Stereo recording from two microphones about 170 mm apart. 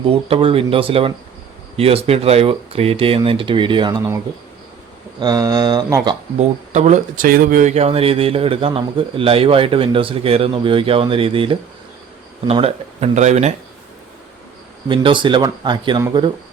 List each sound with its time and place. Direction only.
0.1 s speech: 35° right (ahead or behind)
5.2 s speech: 20° right (ahead or behind)
6.7 s speech: 45° right (ahead or behind)
14.8 s speech: 30° right (ahead or behind)